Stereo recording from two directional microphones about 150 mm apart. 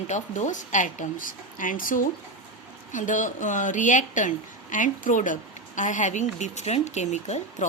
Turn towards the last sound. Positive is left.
turn(degrees=50)  # may be behind; listen again after turning